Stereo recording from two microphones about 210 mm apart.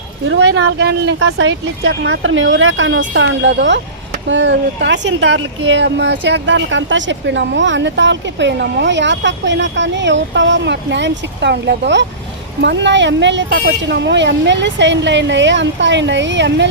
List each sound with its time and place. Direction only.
0.3 s speech: 60° right (ahead or behind)